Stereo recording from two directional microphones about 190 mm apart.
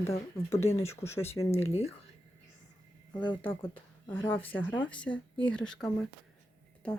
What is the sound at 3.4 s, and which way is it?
Speech, 10° left (ahead or behind).